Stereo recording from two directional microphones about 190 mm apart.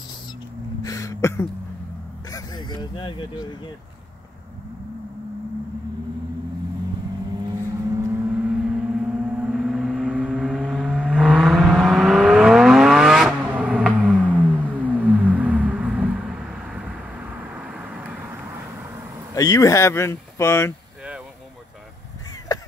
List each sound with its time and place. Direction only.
0.8 s a sound: 15° left (ahead or behind)
2.2 s vehicle: 20° left (ahead or behind)
8.0 s gong: 10° right (ahead or behind)
17.6 s vehicle: 5° right (ahead or behind)
19.3 s speech: 20° left (ahead or behind)
22.5 s a sound: 20° left (ahead or behind)